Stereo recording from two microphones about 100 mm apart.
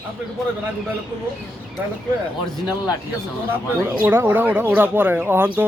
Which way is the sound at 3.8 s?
20° right (ahead or behind).